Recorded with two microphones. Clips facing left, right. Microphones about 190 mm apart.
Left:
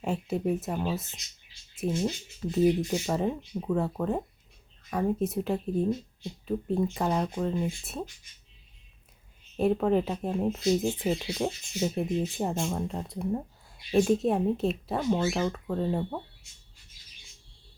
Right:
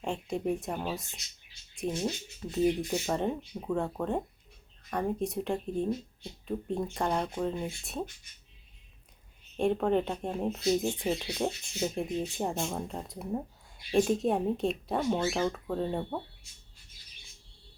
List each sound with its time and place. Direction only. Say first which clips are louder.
0.0 s speech: left 3 dB; 5° left (ahead or behind)
9.6 s speech: left 2 dB; 5° left (ahead or behind)